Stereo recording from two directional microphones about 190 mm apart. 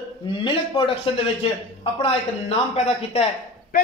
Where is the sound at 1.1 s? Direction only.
25° left (ahead or behind).